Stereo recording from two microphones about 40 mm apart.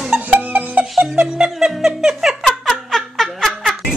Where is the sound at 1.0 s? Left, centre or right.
Right.